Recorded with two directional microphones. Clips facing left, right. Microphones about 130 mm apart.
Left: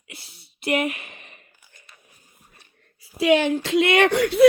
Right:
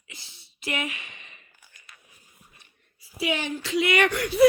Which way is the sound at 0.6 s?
50° left (ahead or behind).